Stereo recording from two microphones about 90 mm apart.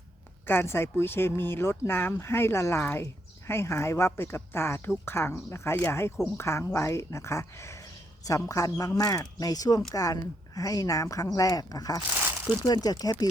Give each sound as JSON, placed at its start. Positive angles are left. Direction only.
{"t": 0.4, "sound": "speech", "side_deg": 25}